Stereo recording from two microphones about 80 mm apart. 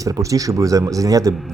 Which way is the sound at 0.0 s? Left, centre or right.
Right.